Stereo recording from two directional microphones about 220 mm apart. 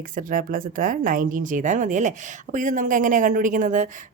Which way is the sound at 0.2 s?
40° right (ahead or behind).